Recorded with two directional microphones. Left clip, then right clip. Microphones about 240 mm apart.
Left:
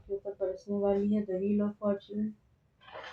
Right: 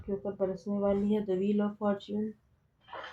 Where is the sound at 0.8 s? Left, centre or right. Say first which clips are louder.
Right 1 dB; right.